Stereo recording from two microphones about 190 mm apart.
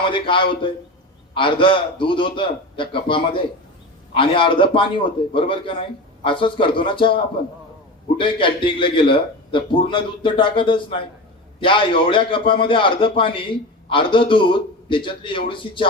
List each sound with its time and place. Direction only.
0.1 s a man's voice: 25° left (ahead or behind)
8.2 s a man's voice: 25° left (ahead or behind)